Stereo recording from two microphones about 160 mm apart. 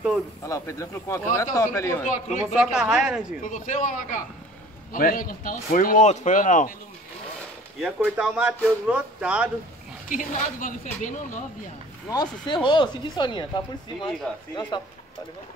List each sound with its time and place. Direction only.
0.4 s speech: 20° left (ahead or behind)
2.0 s a woman's voice: 50° left (ahead or behind)
2.4 s a woman's voice: 5° right (ahead or behind)
3.4 s a woman's voice: 55° left (ahead or behind)
7.8 s speech: 5° right (ahead or behind)
10.0 s a woman's voice: 55° left (ahead or behind)
12.1 s speech: 25° left (ahead or behind)
14.5 s speech: 25° left (ahead or behind)